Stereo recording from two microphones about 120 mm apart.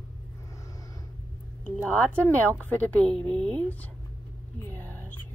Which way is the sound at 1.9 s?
10° left (ahead or behind).